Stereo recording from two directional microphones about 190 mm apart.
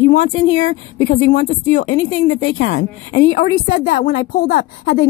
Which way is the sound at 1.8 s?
80° left.